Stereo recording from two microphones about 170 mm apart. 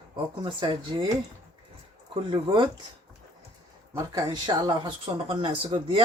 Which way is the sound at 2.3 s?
25° right (ahead or behind).